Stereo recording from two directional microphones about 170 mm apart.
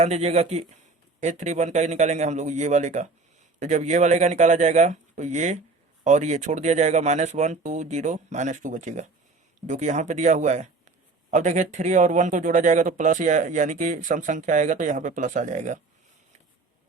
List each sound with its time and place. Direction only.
0.0 s a man's voice: 40° right (ahead or behind)